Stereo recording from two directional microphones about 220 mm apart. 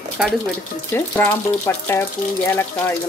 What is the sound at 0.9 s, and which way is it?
Speech, 10° left (ahead or behind).